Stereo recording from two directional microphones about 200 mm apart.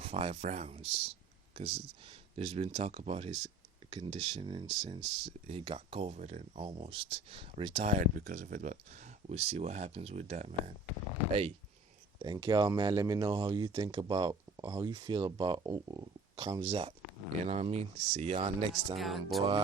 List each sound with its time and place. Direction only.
0.0 s speech: 25° right (ahead or behind)
12.2 s speech: 20° right (ahead or behind)
18.9 s speech: centre (ahead or behind)